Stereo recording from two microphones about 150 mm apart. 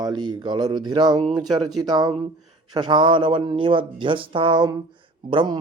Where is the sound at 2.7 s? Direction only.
30° right (ahead or behind).